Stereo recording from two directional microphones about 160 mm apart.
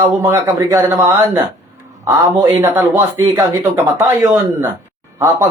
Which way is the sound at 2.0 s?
25° right (ahead or behind).